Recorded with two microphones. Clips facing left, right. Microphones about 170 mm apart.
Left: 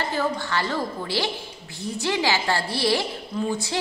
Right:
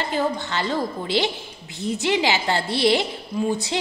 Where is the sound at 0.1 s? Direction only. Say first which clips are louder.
Right 1 dB; 20° right (ahead or behind).